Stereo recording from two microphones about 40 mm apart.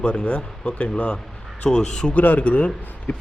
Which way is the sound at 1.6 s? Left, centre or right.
Centre.